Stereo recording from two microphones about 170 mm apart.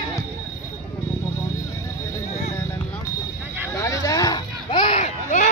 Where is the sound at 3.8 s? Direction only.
20° left (ahead or behind); by 5.5 s 45° left (ahead or behind).